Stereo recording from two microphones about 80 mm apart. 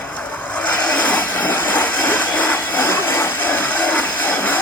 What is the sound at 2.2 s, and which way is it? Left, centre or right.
Wood, left.